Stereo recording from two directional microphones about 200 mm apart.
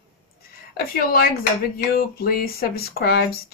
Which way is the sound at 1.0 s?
50° left (ahead or behind).